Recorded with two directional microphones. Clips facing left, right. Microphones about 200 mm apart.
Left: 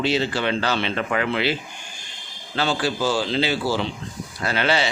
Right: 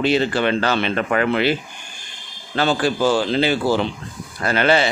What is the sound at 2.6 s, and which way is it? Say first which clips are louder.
A man's voice: right 4 dB; 55° right (ahead or behind).